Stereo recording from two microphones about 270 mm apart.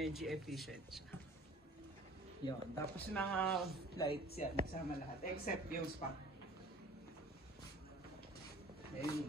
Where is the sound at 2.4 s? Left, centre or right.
Centre.